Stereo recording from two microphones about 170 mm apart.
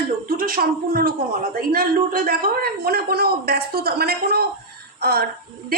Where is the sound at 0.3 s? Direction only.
60° right (ahead or behind).